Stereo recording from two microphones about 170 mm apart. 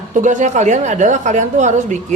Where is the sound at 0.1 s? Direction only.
45° right (ahead or behind).